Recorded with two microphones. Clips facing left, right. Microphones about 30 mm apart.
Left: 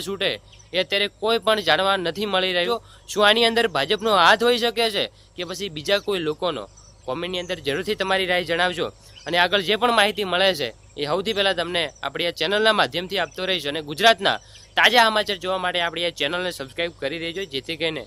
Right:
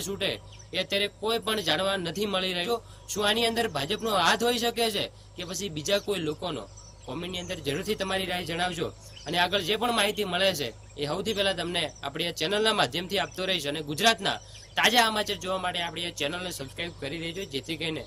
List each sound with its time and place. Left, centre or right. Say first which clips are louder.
0.2 s speech: left 6 dB; left
3.2 s speech: left 8 dB; left
9.2 s speech: left 6 dB; left
15.4 s speech: left 7 dB; left
16.5 s speech: left 8 dB; left
16.7 s speech: left 9 dB; left